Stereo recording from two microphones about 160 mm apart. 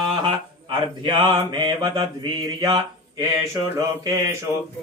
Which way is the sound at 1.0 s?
30° right (ahead or behind).